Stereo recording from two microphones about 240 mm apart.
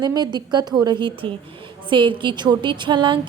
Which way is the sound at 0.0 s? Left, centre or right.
Centre.